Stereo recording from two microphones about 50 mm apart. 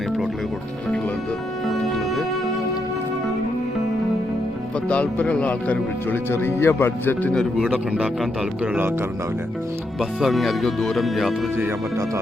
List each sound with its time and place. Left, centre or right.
1.6 s music: centre
4.9 s speech: left
6.3 s speech: left
7.5 s speech: centre
10.0 s speech: centre
11.5 s speech: right